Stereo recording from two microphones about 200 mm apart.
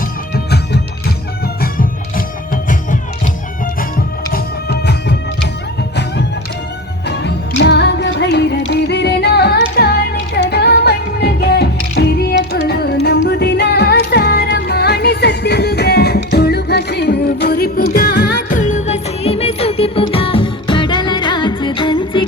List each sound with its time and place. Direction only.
0.3 s music: 55° left (ahead or behind)
4.3 s music: 55° left (ahead or behind)
7.1 s music: 60° left (ahead or behind); by 22.2 s 25° left (ahead or behind)